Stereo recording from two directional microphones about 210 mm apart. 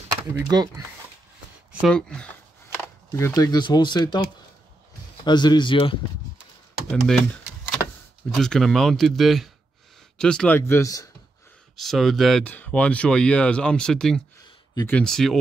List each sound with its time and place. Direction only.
0.3 s speech: 15° right (ahead or behind)
1.7 s speech: centre (ahead or behind); by 5.9 s 25° left (ahead or behind)
6.9 s speech: 5° left (ahead or behind)
8.4 s speech: centre (ahead or behind)
11.7 s speech: centre (ahead or behind)